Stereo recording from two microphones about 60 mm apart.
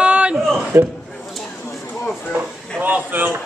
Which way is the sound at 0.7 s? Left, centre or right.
Right.